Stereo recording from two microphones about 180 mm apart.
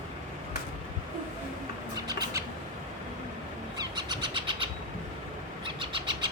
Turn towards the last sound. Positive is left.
turn(degrees=-25)  # may be behind; listen again after turning